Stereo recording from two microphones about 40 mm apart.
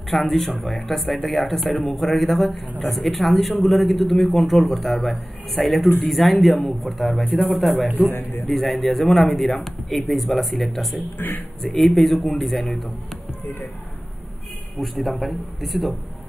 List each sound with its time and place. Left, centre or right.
0.1 s speech: centre
8.1 s a man's voice: left
8.5 s speech: centre
11.1 s speech: left
11.6 s speech: centre
14.8 s speech: centre